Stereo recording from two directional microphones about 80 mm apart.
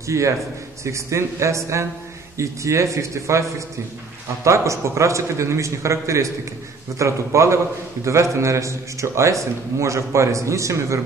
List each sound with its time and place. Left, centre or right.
0.0 s a man's voice: right